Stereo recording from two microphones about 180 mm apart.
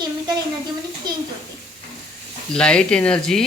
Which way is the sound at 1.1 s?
25° right (ahead or behind).